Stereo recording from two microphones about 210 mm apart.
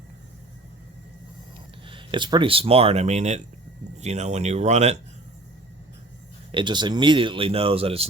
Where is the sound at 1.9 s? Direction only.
25° right (ahead or behind).